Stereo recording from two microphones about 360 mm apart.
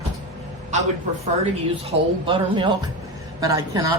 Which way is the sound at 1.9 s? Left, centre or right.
Centre.